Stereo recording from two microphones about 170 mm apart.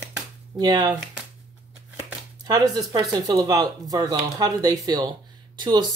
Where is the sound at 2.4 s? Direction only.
25° right (ahead or behind).